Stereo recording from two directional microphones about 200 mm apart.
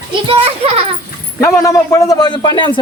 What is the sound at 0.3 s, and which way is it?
Speech, 30° right (ahead or behind).